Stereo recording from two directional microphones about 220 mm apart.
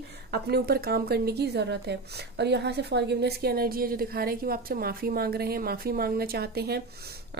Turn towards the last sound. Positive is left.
turn(degrees=-45)  # may be behind; listen again after turning